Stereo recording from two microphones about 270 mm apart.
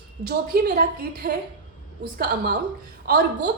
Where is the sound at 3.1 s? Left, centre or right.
Right.